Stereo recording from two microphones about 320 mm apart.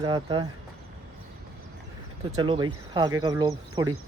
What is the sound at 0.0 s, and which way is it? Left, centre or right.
Speech, centre.